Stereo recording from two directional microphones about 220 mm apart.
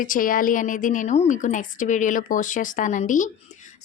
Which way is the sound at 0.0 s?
40° left (ahead or behind).